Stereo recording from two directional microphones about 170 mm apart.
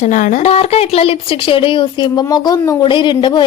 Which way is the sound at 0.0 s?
50° left (ahead or behind).